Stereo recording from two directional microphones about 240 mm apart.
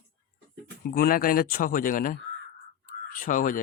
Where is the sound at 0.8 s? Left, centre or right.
Left.